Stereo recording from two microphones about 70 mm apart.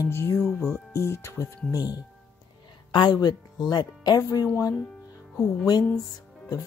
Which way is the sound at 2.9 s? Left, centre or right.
Left.